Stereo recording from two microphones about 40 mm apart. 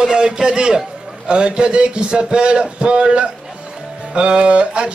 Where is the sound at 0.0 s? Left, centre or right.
Centre.